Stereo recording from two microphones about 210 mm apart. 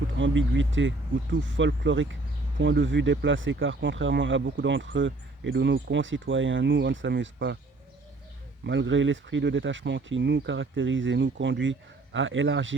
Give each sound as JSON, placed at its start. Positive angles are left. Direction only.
{"t": 0.2, "sound": "speech", "side_deg": -60}
{"t": 8.6, "sound": "speech", "side_deg": -60}